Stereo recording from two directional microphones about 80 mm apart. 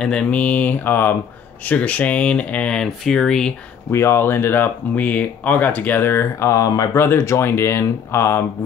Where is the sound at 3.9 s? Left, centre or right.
Left.